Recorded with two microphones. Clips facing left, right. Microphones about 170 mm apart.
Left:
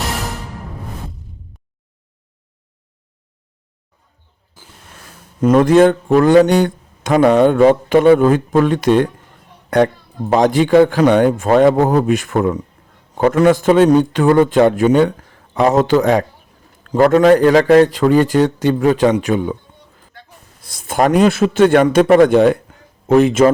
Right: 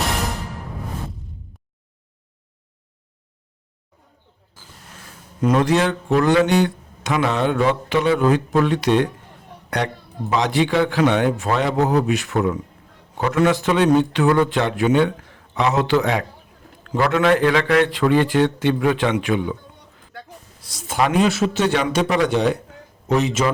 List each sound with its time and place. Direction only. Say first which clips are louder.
5.4 s a man's voice: left 8 dB; 50° left (ahead or behind)
20.6 s speech: left 5 dB; 55° left (ahead or behind)